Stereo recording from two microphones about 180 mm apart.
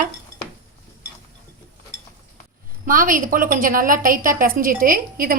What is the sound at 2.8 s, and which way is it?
Speech, 50° right (ahead or behind).